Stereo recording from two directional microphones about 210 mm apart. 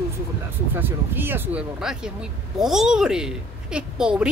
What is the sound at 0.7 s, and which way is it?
A woman's voice, 10° right (ahead or behind).